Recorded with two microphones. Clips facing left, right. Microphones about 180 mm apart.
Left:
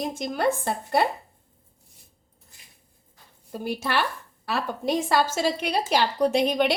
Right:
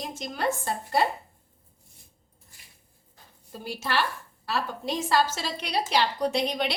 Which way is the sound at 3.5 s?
55° left (ahead or behind).